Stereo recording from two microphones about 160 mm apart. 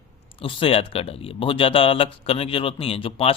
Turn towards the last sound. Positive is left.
turn(degrees=35)  # may be behind; listen again after turning